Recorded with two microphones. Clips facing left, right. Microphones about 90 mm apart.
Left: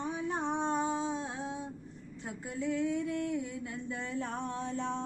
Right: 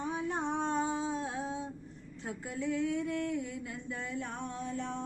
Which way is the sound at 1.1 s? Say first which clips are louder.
Right 1 dB; centre (ahead or behind).